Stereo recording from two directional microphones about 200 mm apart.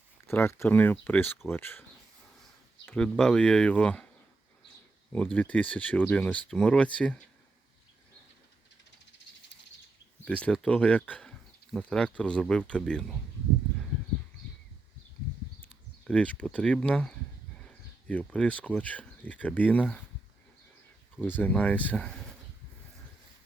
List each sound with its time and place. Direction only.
0.3 s speech: 10° left (ahead or behind)
2.8 s speech: 5° left (ahead or behind)
5.1 s speech: 5° left (ahead or behind)
10.2 s speech: 5° left (ahead or behind)
16.0 s speech: 5° left (ahead or behind)
21.2 s speech: 10° left (ahead or behind)